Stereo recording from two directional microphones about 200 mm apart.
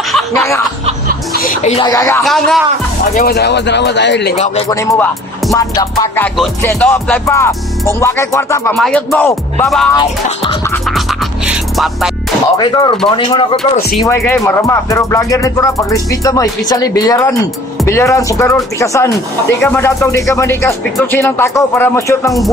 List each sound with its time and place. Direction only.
1.4 s music: 40° left (ahead or behind)
1.8 s music: 15° left (ahead or behind)
2.2 s music: centre (ahead or behind)
3.2 s speech: 55° left (ahead or behind)
4.6 s music: 15° left (ahead or behind)
8.7 s music: centre (ahead or behind)
9.9 s music: 20° left (ahead or behind)
10.9 s music: centre (ahead or behind)
12.5 s music: 20° left (ahead or behind)
14.0 s music: 15° left (ahead or behind)